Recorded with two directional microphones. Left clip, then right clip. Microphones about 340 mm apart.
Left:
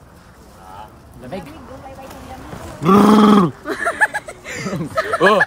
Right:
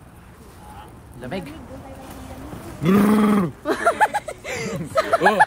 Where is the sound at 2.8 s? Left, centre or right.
Centre.